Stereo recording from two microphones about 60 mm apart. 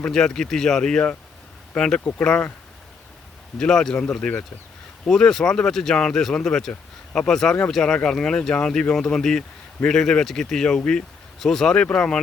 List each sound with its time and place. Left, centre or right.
0.1 s speech: centre
3.6 s speech: centre